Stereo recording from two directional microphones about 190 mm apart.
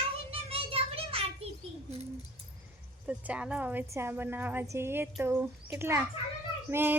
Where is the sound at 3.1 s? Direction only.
5° right (ahead or behind).